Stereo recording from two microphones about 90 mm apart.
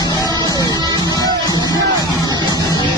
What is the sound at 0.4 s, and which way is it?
Music, 45° left (ahead or behind).